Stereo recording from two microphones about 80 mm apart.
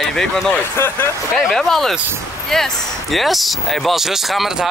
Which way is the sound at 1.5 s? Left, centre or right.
Centre.